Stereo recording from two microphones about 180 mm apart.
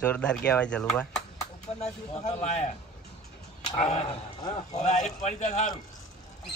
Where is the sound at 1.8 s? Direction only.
40° left (ahead or behind).